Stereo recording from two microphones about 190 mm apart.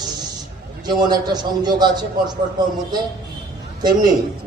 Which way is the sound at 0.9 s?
20° right (ahead or behind).